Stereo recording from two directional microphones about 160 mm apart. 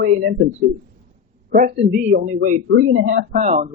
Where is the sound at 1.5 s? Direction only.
70° right (ahead or behind); by 2.2 s 90° right.